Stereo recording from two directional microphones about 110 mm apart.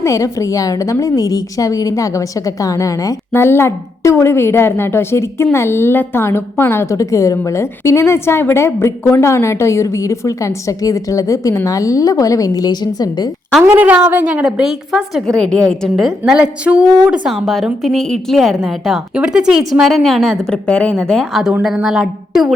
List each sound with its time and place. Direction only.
0.0 s a woman's voice: 30° left (ahead or behind)
13.7 s a woman's voice: 15° right (ahead or behind)
17.3 s a woman's voice: centre (ahead or behind)